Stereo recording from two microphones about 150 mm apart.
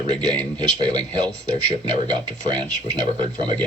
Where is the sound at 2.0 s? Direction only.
30° right (ahead or behind).